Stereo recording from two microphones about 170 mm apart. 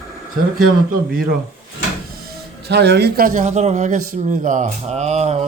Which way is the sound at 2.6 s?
75° right (ahead or behind).